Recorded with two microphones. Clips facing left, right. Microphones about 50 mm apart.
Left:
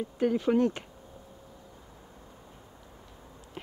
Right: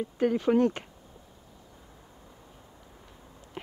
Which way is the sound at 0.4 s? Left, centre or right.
Centre.